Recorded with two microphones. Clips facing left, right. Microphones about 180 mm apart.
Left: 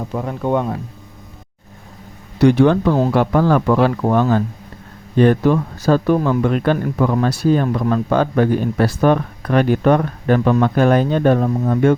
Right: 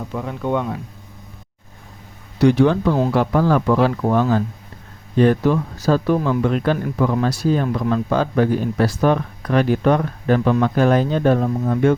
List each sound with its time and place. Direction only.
0.1 s speech: 40° left (ahead or behind)
2.4 s speech: 60° left (ahead or behind)